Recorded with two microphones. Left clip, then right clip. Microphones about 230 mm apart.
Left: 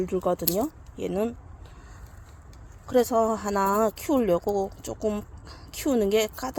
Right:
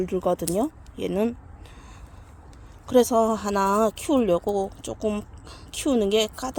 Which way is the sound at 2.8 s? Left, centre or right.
Centre.